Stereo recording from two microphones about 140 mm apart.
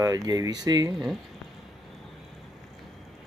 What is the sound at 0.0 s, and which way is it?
Speech, 25° right (ahead or behind).